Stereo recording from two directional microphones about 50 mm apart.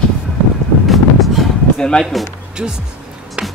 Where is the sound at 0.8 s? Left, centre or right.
Centre.